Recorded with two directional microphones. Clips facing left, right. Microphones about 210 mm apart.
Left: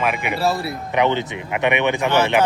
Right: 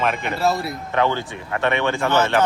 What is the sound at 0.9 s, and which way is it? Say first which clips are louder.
A man's voice: left 2 dB; 20° left (ahead or behind).